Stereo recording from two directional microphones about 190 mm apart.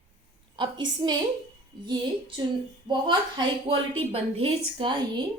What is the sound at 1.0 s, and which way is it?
Speech, 20° right (ahead or behind).